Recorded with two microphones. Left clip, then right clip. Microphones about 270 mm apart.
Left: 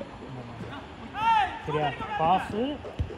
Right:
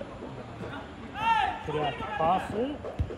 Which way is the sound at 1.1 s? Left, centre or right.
Left.